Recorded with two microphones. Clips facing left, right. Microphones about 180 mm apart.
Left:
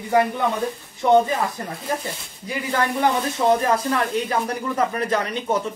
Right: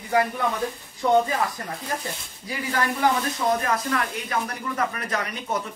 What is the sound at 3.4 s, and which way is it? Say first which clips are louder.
Speech: left 6 dB; 30° left (ahead or behind).